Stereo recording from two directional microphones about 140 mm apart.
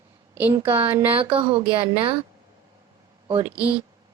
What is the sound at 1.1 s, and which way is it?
Speech, 40° right (ahead or behind).